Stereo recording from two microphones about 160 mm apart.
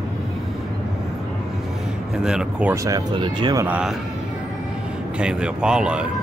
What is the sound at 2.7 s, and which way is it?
Speech, 20° right (ahead or behind).